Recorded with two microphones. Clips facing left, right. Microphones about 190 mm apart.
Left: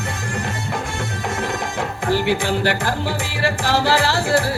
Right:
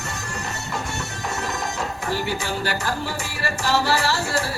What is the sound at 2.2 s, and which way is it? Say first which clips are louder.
Music: left 7 dB; 70° left (ahead or behind).